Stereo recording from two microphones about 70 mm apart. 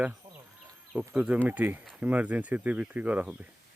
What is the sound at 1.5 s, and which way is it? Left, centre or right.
Speech, right.